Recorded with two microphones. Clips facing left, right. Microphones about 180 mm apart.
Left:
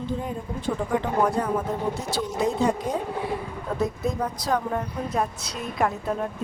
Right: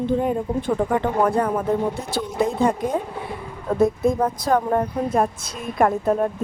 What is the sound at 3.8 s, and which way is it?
A woman's voice, 50° right (ahead or behind).